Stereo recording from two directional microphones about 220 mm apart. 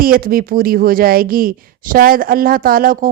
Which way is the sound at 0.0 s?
40° right (ahead or behind).